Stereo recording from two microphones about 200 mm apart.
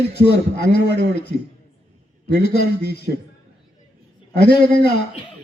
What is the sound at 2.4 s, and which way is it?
Speech, 55° left (ahead or behind).